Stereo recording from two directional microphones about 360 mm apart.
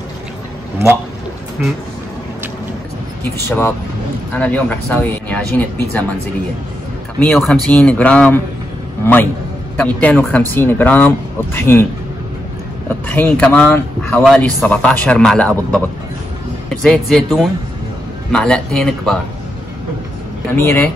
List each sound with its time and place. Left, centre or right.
1.6 s speech: centre
3.4 s speech: centre
7.2 s speech: centre
13.1 s speech: centre
20.5 s speech: centre